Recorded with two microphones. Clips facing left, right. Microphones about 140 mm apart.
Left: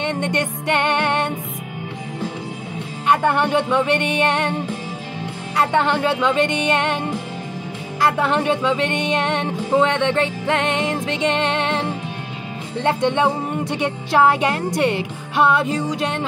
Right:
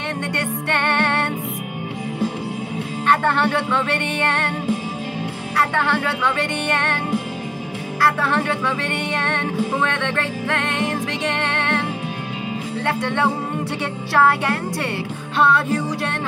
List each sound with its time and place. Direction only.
0.1 s music: 20° left (ahead or behind)
3.1 s music: 15° left (ahead or behind)
5.6 s music: 20° left (ahead or behind)
8.0 s music: 20° left (ahead or behind)
12.8 s music: 20° left (ahead or behind)